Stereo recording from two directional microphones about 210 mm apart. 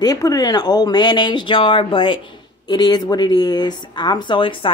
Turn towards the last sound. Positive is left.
turn(degrees=25)  # may be behind; listen again after turning